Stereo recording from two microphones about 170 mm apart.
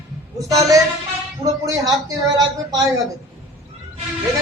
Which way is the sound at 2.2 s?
20° right (ahead or behind).